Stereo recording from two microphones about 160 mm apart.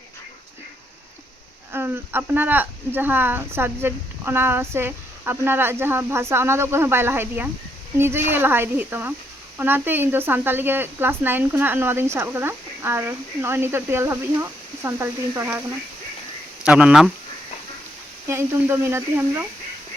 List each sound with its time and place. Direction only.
1.7 s speech: 15° right (ahead or behind)
16.6 s speech: 5° right (ahead or behind)
18.3 s speech: 15° right (ahead or behind)